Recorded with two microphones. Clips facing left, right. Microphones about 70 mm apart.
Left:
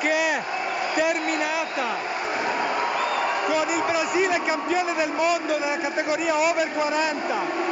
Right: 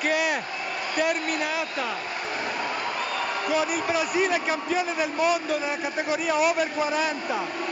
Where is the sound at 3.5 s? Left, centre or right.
Centre.